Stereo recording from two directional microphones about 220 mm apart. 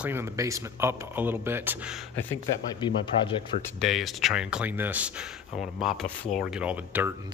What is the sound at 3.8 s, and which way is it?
Speech, centre (ahead or behind).